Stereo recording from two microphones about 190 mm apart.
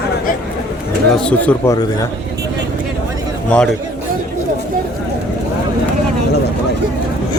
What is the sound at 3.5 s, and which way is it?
Speech, 5° left (ahead or behind).